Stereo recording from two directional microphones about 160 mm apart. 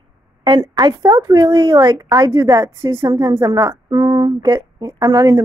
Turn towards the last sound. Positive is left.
turn(degrees=-20)  # may be behind; listen again after turning